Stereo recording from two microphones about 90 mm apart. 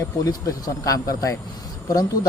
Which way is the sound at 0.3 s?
40° left (ahead or behind).